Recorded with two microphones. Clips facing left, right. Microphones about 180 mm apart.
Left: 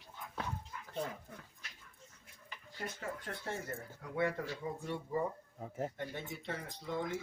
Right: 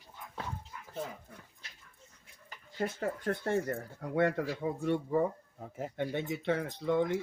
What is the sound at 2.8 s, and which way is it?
Speech, 55° right (ahead or behind).